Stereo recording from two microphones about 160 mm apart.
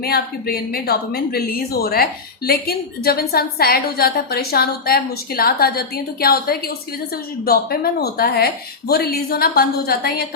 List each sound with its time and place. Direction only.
0.0 s a woman's voice: 70° left (ahead or behind)